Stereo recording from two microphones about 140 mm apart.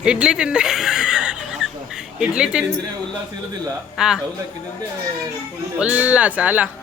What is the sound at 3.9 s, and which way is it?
Speech, 5° right (ahead or behind).